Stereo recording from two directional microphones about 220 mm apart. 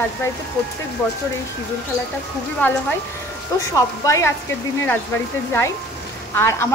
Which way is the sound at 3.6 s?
15° left (ahead or behind).